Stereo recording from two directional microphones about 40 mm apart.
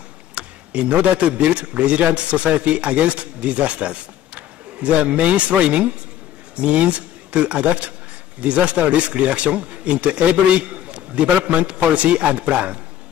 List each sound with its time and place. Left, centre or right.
0.3 s a man's voice: right